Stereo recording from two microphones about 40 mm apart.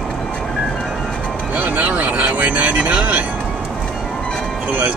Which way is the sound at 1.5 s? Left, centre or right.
Right.